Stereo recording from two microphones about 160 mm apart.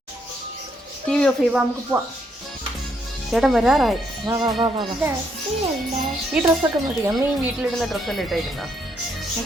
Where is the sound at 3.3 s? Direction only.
Centre (ahead or behind).